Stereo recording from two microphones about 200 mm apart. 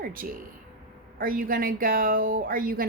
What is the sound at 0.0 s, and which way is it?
A woman's voice, 45° right (ahead or behind).